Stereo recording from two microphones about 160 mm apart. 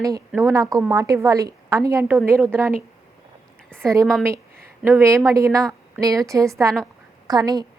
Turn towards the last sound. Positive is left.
turn(degrees=-25)  # may be behind; listen again after turning